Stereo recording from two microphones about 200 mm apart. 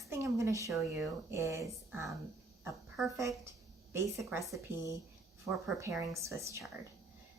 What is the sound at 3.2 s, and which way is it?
Speech, 15° right (ahead or behind).